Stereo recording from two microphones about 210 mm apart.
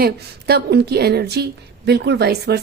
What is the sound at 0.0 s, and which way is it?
A woman's voice, 50° right (ahead or behind).